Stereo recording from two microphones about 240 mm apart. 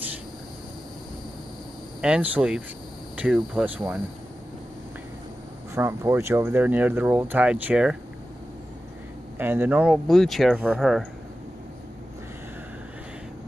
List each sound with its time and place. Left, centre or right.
2.0 s speech: centre
5.8 s speech: centre
9.4 s speech: centre